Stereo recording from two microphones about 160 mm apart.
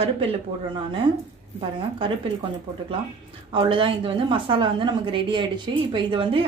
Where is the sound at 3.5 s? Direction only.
30° right (ahead or behind).